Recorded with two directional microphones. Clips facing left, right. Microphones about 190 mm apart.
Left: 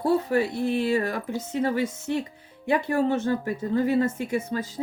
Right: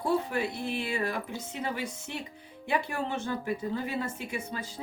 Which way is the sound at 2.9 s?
45° left (ahead or behind).